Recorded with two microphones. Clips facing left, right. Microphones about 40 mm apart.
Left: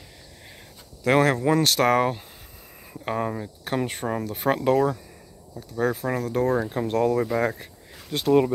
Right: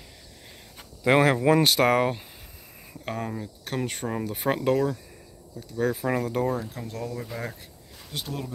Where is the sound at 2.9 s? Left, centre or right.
Centre.